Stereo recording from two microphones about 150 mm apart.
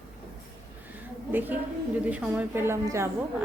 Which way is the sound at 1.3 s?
10° right (ahead or behind).